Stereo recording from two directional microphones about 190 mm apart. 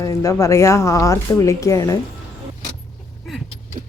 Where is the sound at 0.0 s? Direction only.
15° left (ahead or behind).